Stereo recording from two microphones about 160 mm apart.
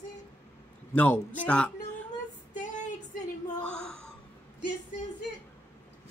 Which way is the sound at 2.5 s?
50° left (ahead or behind).